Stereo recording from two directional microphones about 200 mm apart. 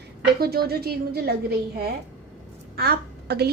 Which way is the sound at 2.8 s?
55° right (ahead or behind).